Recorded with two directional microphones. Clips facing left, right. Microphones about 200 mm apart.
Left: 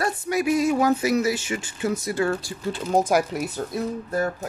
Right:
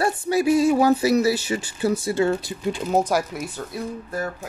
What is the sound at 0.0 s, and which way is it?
Speech, 30° right (ahead or behind).